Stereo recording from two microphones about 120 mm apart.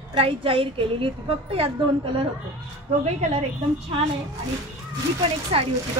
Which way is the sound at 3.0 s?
65° right (ahead or behind).